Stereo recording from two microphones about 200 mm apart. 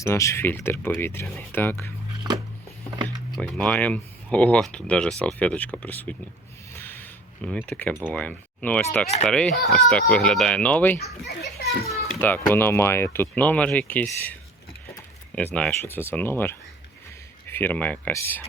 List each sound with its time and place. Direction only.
0.0 s speech: 15° left (ahead or behind)
3.3 s speech: 5° left (ahead or behind)
6.7 s a sound: 10° left (ahead or behind)
8.1 s speech: 5° left (ahead or behind)
9.0 s speech: 35° left (ahead or behind)
9.3 s speech: 5° left (ahead or behind)
11.3 s a child's voice: 55° left (ahead or behind)
12.2 s speech: 10° left (ahead or behind)
15.5 s speech: 10° left (ahead or behind)